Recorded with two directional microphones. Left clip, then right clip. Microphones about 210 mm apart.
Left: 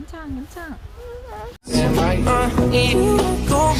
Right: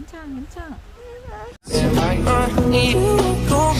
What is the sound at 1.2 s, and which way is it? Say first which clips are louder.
Music: even; 20° left (ahead or behind).